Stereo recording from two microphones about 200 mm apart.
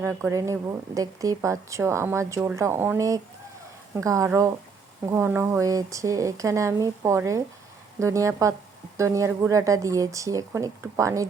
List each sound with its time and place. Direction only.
0.0 s speech: 10° right (ahead or behind)